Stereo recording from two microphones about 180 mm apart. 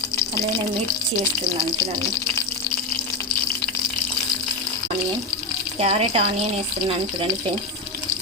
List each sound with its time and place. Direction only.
5.8 s speech: 30° right (ahead or behind)